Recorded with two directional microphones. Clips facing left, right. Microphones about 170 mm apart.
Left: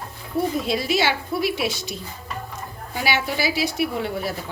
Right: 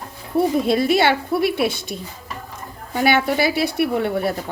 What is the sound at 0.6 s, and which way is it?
A woman's voice, 55° right (ahead or behind).